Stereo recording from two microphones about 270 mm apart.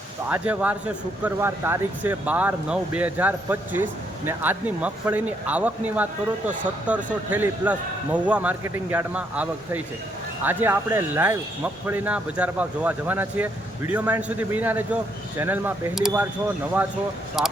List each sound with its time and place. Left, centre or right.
0.3 s speech: centre
17.4 s speech: centre